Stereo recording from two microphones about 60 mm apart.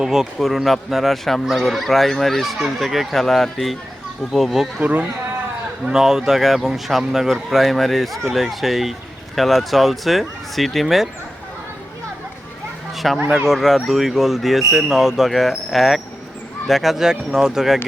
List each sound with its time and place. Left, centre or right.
0.0 s speech: centre
4.8 s speech: right
5.8 s speech: centre
13.0 s speech: centre